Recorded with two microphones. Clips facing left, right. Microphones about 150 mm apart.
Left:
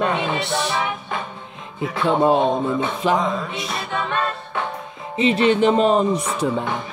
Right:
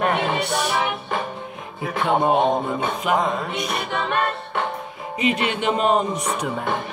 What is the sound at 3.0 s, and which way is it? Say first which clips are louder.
Speech: left 2 dB; 30° left (ahead or behind).